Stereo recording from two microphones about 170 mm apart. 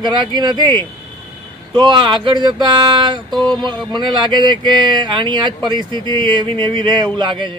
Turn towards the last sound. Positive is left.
turn(degrees=-25)  # may be behind; listen again after turning